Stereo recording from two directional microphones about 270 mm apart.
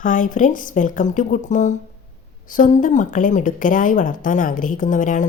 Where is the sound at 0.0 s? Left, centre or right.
Left.